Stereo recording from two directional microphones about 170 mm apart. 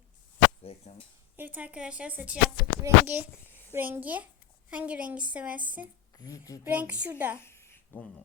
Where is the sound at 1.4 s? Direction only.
10° right (ahead or behind).